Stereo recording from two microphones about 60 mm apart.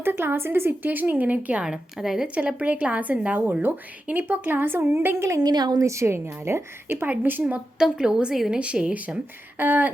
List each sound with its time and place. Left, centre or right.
0.0 s a woman's voice: right
1.6 s a woman's voice: centre
2.6 s a woman's voice: right
5.2 s a woman's voice: right
5.9 s a woman's voice: right
7.8 s a woman's voice: centre
9.6 s a woman's voice: right